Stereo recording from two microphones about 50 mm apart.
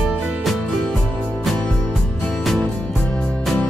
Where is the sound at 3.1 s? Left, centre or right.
Left.